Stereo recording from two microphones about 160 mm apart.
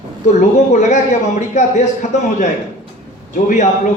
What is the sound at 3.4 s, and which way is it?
Speech, 50° left (ahead or behind).